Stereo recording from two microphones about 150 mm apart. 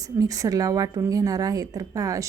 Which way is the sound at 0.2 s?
25° right (ahead or behind).